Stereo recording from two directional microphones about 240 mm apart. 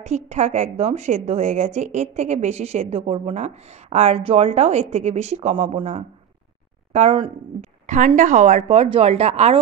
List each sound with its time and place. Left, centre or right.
0.0 s a woman's voice: right